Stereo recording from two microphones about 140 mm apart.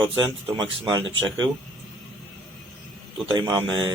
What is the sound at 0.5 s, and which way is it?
Speech, 30° right (ahead or behind).